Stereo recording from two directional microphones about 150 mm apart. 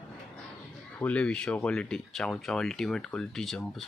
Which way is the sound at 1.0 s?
10° left (ahead or behind).